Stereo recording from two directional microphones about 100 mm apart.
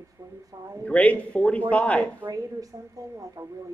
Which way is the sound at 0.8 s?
15° left (ahead or behind).